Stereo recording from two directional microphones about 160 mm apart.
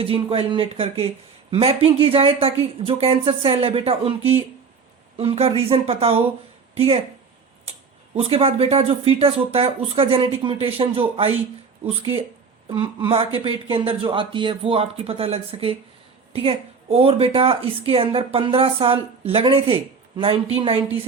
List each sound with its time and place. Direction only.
0.0 s speech: 35° right (ahead or behind)
8.1 s speech: 35° right (ahead or behind)
12.6 s speech: 35° right (ahead or behind)